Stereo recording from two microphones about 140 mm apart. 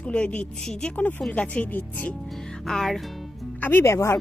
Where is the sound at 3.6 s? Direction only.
15° left (ahead or behind).